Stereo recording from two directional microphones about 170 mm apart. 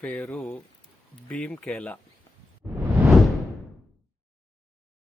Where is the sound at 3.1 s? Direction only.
Centre (ahead or behind).